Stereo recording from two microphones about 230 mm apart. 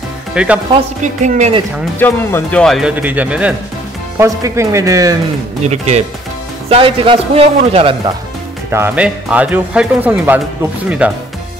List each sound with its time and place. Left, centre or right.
0.3 s speech: centre
1.0 s speech: right
2.0 s a man's voice: centre
5.7 s a man's voice: right
8.6 s a man's voice: centre